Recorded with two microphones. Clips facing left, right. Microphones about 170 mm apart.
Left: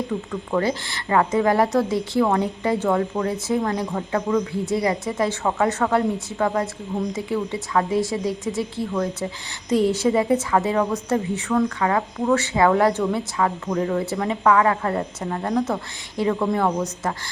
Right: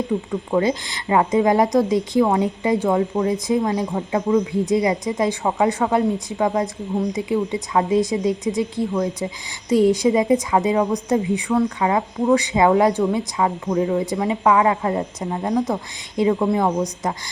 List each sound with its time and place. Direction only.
0.1 s speech: 15° right (ahead or behind)